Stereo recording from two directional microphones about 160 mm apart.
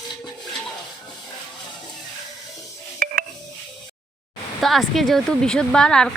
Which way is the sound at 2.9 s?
60° right (ahead or behind).